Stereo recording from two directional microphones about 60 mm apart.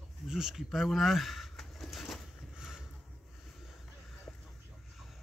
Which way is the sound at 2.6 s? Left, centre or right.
Centre.